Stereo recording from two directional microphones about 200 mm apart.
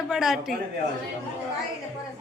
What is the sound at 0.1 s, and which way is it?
Speech, centre (ahead or behind).